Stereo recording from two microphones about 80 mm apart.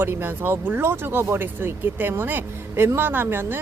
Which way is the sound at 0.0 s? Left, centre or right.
Right.